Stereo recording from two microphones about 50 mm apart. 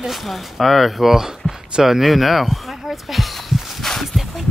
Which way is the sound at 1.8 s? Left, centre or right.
Centre.